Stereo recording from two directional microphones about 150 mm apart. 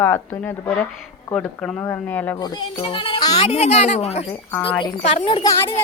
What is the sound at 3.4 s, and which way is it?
Speech, 45° left (ahead or behind).